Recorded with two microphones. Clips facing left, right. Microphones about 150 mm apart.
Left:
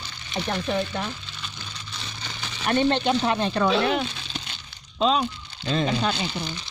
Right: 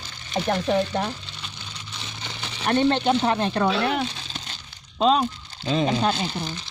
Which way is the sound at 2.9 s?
30° right (ahead or behind).